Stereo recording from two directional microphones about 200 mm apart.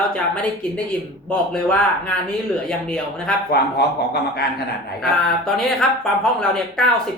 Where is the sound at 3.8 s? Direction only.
55° left (ahead or behind).